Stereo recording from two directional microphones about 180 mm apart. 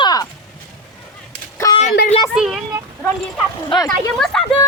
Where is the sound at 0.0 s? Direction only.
20° left (ahead or behind).